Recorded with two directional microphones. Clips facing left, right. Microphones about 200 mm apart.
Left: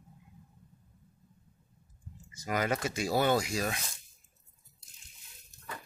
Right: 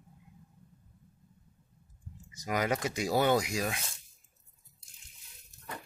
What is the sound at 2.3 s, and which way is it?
Speech, 15° right (ahead or behind).